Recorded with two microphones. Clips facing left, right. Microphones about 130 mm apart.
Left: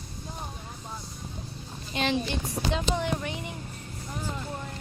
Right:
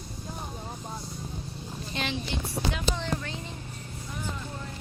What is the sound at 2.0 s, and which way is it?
Speech, 15° left (ahead or behind).